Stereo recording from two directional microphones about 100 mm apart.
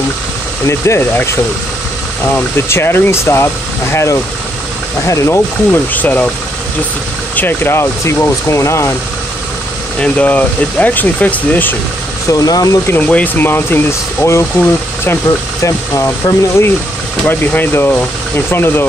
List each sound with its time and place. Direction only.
0.7 s speech: 25° left (ahead or behind)
5.9 s speech: 15° left (ahead or behind)
7.3 s speech: 20° left (ahead or behind)
9.9 s speech: 10° left (ahead or behind)
12.3 s speech: 40° left (ahead or behind)
12.8 s speech: 20° left (ahead or behind)
15.6 s speech: 30° left (ahead or behind)